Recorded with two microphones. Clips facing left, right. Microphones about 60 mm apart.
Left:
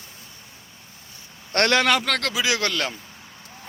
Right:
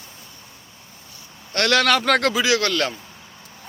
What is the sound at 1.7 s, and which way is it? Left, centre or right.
Speech, centre.